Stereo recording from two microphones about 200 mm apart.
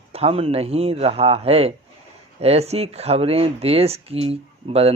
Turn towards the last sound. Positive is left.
turn(degrees=-30)  # may be behind; listen again after turning